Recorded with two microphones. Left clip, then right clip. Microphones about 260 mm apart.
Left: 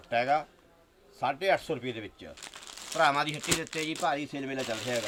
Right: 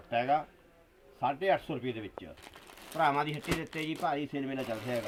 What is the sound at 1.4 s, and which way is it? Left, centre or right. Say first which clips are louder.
Speech: left 3 dB; centre.